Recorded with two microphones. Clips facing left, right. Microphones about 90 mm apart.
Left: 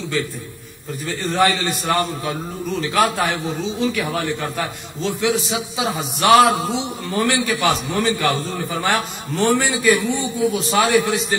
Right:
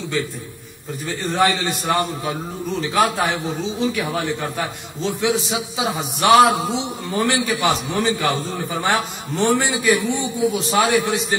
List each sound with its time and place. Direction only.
1.0 s a man's voice: 15° right (ahead or behind)